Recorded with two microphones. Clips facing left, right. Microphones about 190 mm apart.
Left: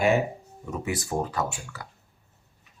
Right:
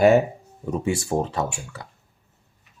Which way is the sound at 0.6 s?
30° right (ahead or behind).